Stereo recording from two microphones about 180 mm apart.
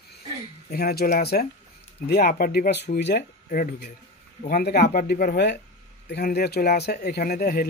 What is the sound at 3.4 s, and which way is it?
Speech, 50° left (ahead or behind).